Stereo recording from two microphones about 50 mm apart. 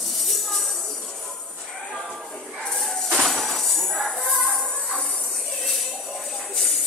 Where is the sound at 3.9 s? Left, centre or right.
Centre.